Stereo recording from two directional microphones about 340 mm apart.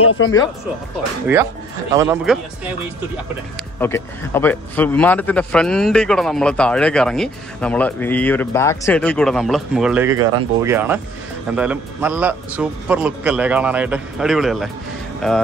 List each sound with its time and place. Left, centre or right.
0.0 s speech: left
1.2 s a man's voice: centre
3.8 s a man's voice: centre